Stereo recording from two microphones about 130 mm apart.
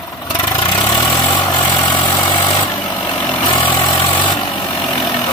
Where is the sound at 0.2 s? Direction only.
30° left (ahead or behind).